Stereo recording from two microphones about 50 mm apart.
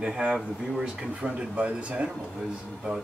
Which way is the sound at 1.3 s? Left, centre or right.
Right.